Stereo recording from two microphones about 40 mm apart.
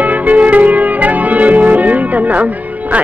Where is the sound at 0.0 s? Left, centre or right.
Right.